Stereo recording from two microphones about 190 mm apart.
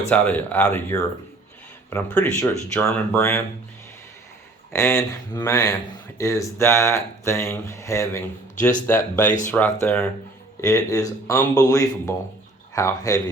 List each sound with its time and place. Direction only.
0.1 s speech: 10° left (ahead or behind)
4.7 s speech: 15° left (ahead or behind)